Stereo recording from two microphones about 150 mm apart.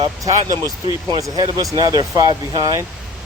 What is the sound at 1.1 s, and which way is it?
Speech, 25° right (ahead or behind).